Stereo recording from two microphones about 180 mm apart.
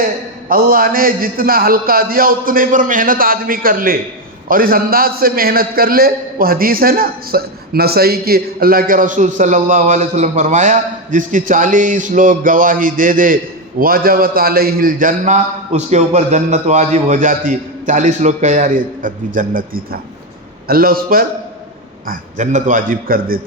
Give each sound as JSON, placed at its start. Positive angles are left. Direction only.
{"t": 0.0, "sound": "a man's voice", "side_deg": -55}